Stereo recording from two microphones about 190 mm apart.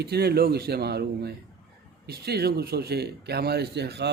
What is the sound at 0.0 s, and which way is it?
Speech, 55° right (ahead or behind).